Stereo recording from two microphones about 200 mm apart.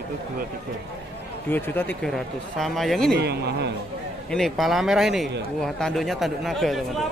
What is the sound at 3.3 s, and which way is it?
Speech, 55° right (ahead or behind).